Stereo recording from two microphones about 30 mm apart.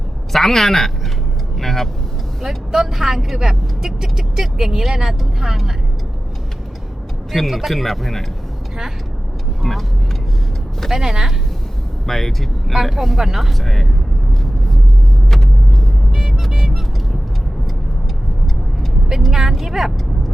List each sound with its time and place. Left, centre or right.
0.3 s a woman's voice: centre
2.7 s speech: centre
7.3 s speech: centre
9.6 s speech: centre
10.9 s speech: centre
12.0 s speech: centre
15.3 s vehicle: centre
16.1 s vehicle: centre
19.3 s speech: centre